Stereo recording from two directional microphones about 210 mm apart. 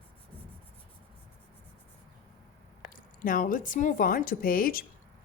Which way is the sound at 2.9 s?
40° left (ahead or behind).